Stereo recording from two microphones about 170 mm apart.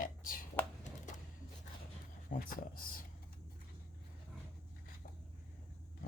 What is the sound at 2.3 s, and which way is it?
Speech, 50° left (ahead or behind).